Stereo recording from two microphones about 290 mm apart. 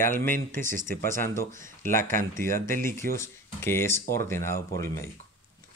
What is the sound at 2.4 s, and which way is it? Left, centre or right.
Speech, centre.